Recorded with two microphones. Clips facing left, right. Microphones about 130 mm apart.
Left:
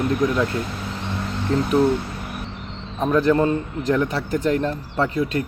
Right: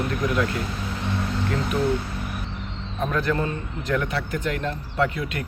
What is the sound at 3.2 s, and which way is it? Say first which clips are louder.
A man's voice: left 7 dB; 35° left (ahead or behind).